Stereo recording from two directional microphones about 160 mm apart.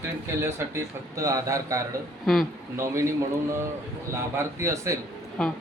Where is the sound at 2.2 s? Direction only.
Centre (ahead or behind).